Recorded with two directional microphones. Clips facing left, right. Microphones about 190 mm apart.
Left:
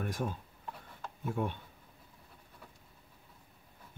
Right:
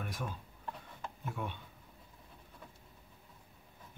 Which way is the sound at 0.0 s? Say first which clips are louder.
Left 6 dB; 45° left (ahead or behind).